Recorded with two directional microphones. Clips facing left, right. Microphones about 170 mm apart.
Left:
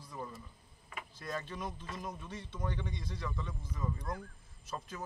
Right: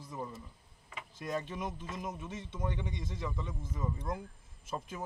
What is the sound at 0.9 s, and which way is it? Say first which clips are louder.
Speech: right 4 dB; 15° right (ahead or behind).